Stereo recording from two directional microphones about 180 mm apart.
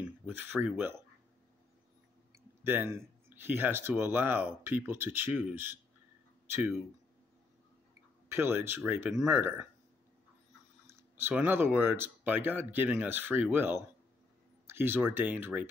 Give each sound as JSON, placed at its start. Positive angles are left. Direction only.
{"t": 0.3, "sound": "speech", "side_deg": -10}
{"t": 2.6, "sound": "speech", "side_deg": -10}
{"t": 8.3, "sound": "speech", "side_deg": -10}
{"t": 10.9, "sound": "speech", "side_deg": -10}